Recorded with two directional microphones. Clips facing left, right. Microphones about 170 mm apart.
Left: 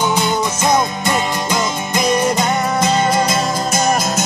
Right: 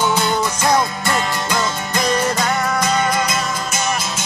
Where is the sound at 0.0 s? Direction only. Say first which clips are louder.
Left 1 dB; 15° left (ahead or behind).